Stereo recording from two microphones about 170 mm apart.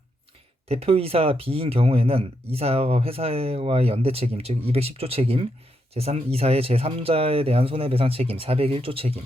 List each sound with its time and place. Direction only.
0.7 s speech: 35° right (ahead or behind)